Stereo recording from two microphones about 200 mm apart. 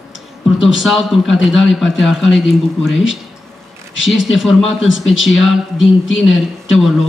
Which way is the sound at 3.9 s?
70° left (ahead or behind).